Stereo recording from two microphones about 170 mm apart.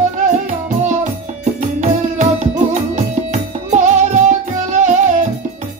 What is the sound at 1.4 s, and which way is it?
Music, 45° right (ahead or behind).